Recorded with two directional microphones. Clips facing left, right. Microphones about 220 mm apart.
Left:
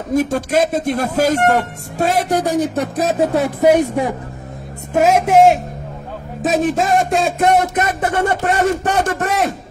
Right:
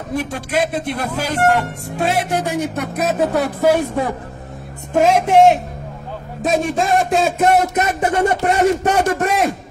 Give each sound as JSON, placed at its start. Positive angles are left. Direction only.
{"t": 0.1, "sound": "speech", "side_deg": 45}
{"t": 1.5, "sound": "music", "side_deg": 40}
{"t": 4.9, "sound": "a man's voice", "side_deg": 5}